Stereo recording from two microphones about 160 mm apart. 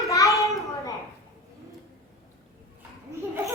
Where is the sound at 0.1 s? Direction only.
20° left (ahead or behind).